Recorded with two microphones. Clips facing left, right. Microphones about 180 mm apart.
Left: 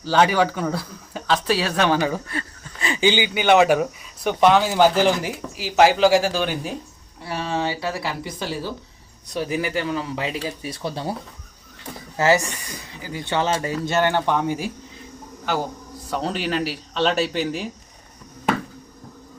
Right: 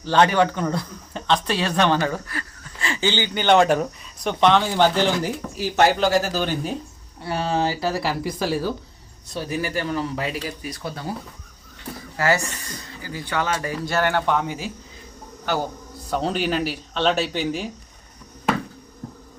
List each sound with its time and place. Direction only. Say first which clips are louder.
0.0 s speech: even; 5° left (ahead or behind)
7.3 s a sound: right 2 dB; 30° right (ahead or behind)
8.2 s speech: right 5 dB; centre (ahead or behind)
9.3 s speech: left 2 dB; 15° left (ahead or behind)
12.1 s a woman's voice: left 3 dB; 20° left (ahead or behind)
16.0 s speech: right 2 dB; centre (ahead or behind)